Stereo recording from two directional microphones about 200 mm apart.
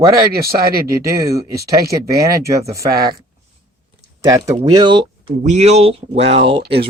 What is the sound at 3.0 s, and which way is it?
Speech, 50° right (ahead or behind).